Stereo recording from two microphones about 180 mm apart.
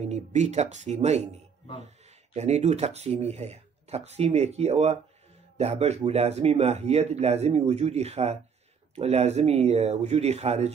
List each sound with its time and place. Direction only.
0.0 s speech: 40° right (ahead or behind)
2.3 s speech: 40° right (ahead or behind)